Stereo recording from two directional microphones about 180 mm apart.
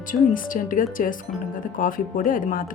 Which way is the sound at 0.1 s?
50° left (ahead or behind).